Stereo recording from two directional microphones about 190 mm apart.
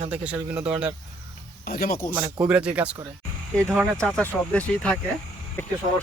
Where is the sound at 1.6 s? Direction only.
50° left (ahead or behind).